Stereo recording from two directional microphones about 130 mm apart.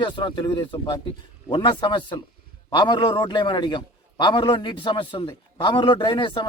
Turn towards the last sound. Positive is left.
turn(degrees=40)  # may be behind; listen again after turning